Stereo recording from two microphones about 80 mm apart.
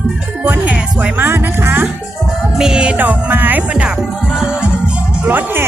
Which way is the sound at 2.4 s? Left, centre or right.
Centre.